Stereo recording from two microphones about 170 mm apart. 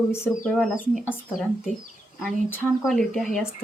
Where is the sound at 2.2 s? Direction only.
10° left (ahead or behind).